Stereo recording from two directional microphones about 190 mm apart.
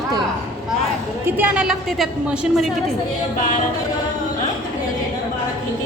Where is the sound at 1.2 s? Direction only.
5° right (ahead or behind).